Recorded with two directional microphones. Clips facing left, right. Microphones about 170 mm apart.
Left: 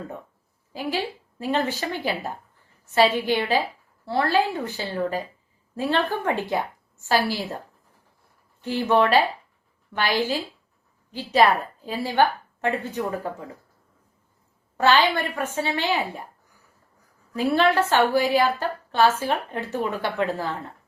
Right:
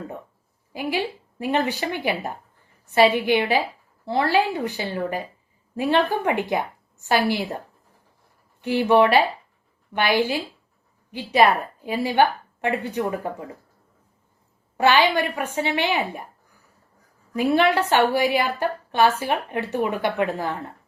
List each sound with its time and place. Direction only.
0.7 s a woman's voice: 15° right (ahead or behind)
8.6 s a woman's voice: 15° right (ahead or behind)
14.8 s a woman's voice: 15° right (ahead or behind)
17.3 s a woman's voice: 15° right (ahead or behind)